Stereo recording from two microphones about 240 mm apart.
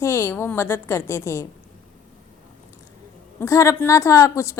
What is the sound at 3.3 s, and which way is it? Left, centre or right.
A woman's voice, centre.